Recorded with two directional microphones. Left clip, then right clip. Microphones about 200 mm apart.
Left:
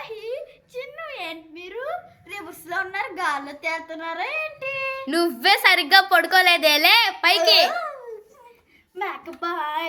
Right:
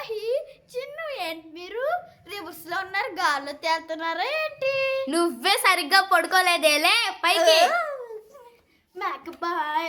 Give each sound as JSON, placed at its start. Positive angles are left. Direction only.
{"t": 0.0, "sound": "a sound", "side_deg": -15}
{"t": 5.0, "sound": "a woman's voice", "side_deg": 0}
{"t": 9.0, "sound": "a child's voice", "side_deg": -15}